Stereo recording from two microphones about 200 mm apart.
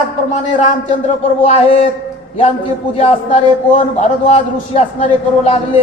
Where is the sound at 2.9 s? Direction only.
35° left (ahead or behind).